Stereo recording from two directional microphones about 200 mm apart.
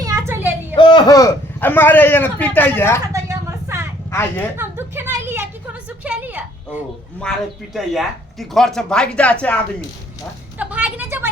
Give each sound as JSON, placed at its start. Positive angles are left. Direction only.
{"t": 0.0, "sound": "a sound", "side_deg": -15}
{"t": 0.8, "sound": "a man's voice", "side_deg": 25}
{"t": 3.1, "sound": "vehicle", "side_deg": -15}
{"t": 4.1, "sound": "a man's voice", "side_deg": 10}
{"t": 4.5, "sound": "a sound", "side_deg": -10}
{"t": 6.0, "sound": "a woman's voice", "side_deg": -5}
{"t": 10.6, "sound": "a woman's voice", "side_deg": -5}